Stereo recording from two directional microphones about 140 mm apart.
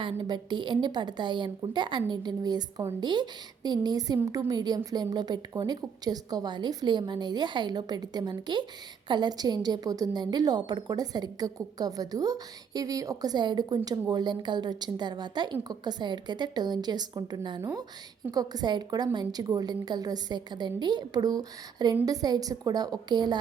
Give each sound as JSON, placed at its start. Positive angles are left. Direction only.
{"t": 0.0, "sound": "a woman's voice", "side_deg": -35}